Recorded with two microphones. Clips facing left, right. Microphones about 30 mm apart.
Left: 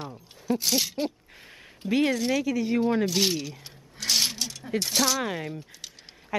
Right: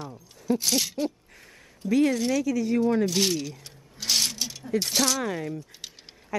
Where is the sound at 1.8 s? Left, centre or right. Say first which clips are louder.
Right 2 dB; left.